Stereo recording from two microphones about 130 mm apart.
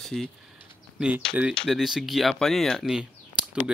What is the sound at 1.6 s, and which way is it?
Speech, centre (ahead or behind).